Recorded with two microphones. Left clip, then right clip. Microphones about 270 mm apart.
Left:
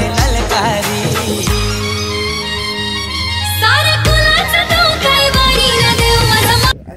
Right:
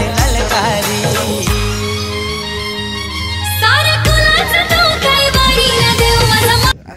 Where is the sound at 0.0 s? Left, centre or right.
Centre.